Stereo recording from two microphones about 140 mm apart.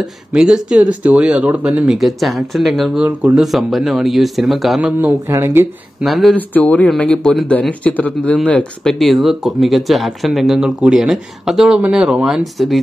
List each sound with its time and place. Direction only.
0.0 s speech: 5° right (ahead or behind)
5.2 s speech: 15° right (ahead or behind)
6.0 s speech: centre (ahead or behind)
6.3 s speech: 10° left (ahead or behind)